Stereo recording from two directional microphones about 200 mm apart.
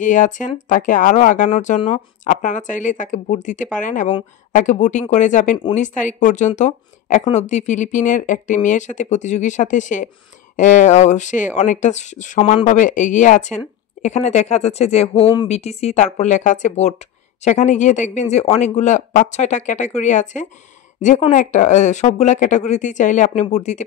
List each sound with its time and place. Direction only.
0.0 s speech: 40° left (ahead or behind)